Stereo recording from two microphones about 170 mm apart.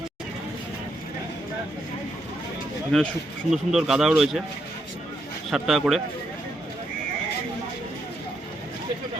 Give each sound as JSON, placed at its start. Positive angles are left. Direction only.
{"t": 2.9, "sound": "speech", "side_deg": 5}
{"t": 5.5, "sound": "speech", "side_deg": 0}